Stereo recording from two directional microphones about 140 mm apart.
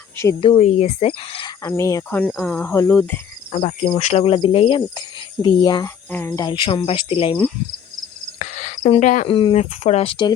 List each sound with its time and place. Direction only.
0.3 s speech: 40° left (ahead or behind)
0.6 s speech: 50° left (ahead or behind)
1.6 s speech: 20° left (ahead or behind)
2.3 s speech: 10° left (ahead or behind)
3.5 s cricket: 60° left (ahead or behind)
3.9 s speech: 50° left (ahead or behind); by 5.9 s 30° left (ahead or behind)
6.1 s speech: 15° left (ahead or behind)
6.5 s speech: 35° left (ahead or behind)
8.4 s cricket: 60° left (ahead or behind)
9.2 s speech: 40° left (ahead or behind)